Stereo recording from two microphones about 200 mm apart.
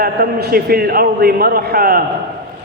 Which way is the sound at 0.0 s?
50° right (ahead or behind).